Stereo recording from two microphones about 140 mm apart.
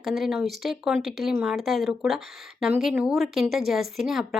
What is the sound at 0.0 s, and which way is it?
Speech, centre (ahead or behind).